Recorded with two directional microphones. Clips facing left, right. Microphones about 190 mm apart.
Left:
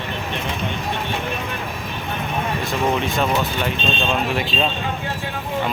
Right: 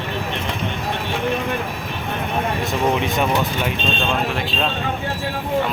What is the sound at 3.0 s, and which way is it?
Speech, 15° right (ahead or behind).